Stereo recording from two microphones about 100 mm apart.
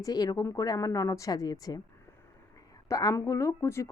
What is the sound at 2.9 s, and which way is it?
A woman's voice, 35° left (ahead or behind).